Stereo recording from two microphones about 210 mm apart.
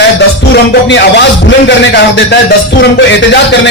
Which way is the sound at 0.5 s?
55° left (ahead or behind).